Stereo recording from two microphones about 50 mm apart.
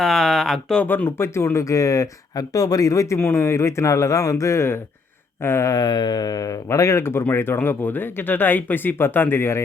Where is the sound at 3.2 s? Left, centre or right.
Left.